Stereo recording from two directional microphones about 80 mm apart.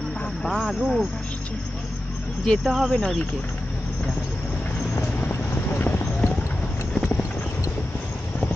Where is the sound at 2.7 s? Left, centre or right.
Centre.